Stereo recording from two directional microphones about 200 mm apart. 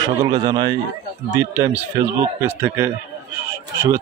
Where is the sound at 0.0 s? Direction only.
20° right (ahead or behind).